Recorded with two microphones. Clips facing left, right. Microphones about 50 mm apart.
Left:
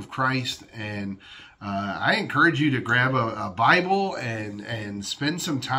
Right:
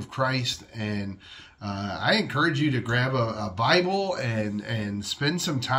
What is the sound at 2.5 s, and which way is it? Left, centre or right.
Speech, left.